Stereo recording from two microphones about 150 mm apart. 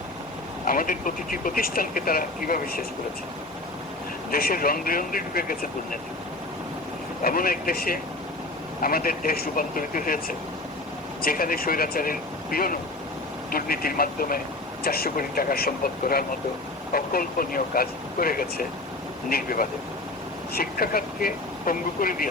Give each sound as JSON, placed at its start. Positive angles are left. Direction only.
{"t": 0.7, "sound": "speech", "side_deg": 70}
{"t": 4.3, "sound": "speech", "side_deg": 80}
{"t": 7.2, "sound": "speech", "side_deg": 75}
{"t": 14.8, "sound": "speech", "side_deg": 90}
{"t": 16.9, "sound": "speech", "side_deg": 75}
{"t": 20.5, "sound": "speech", "side_deg": 85}